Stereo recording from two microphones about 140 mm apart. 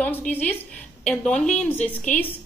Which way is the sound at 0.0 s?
10° left (ahead or behind).